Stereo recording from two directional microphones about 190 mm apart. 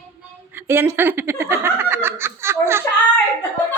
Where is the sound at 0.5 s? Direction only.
10° right (ahead or behind).